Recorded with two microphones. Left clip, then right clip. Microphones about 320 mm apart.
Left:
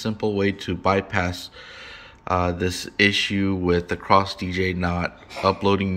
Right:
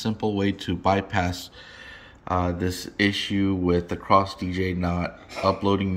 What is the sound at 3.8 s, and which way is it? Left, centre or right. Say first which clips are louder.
Speech: left 1 dB; left.